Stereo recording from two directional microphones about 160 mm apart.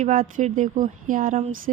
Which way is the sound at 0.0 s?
50° right (ahead or behind).